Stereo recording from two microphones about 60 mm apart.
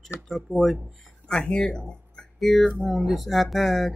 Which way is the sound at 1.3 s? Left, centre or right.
Centre.